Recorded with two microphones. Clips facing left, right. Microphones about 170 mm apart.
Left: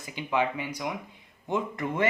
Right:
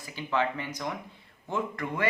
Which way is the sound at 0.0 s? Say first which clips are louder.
Left 1 dB; 20° left (ahead or behind).